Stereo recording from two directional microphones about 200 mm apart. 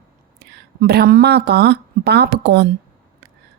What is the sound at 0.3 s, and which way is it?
Speech, 55° right (ahead or behind).